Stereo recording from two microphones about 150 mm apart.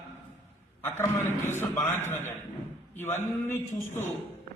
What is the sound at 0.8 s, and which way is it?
A man's voice, 15° left (ahead or behind).